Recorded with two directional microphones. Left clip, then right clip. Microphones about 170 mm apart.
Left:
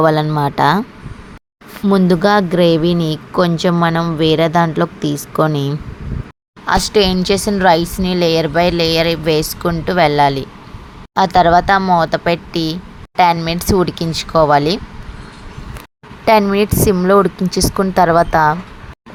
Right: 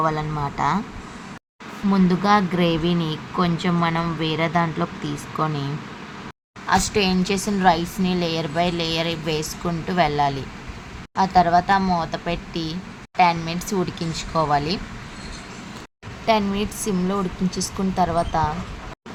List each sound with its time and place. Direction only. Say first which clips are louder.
0.0 s speech: left 10 dB; 50° left (ahead or behind)
1.9 s speech: left 6 dB; 50° left (ahead or behind)
6.7 s speech: left 7 dB; 40° left (ahead or behind)
16.2 s speech: left 9 dB; 45° left (ahead or behind)